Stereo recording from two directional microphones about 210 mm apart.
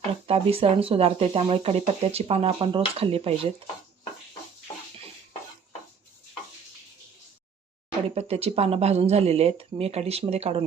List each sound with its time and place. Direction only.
0.3 s speech: 30° right (ahead or behind)
8.1 s speech: 30° right (ahead or behind)